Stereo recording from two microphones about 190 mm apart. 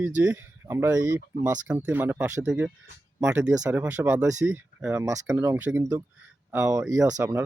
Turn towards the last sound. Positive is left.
turn(degrees=-15)  # may be behind; listen again after turning